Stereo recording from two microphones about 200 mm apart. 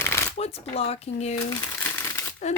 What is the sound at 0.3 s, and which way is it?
Speech, 30° left (ahead or behind).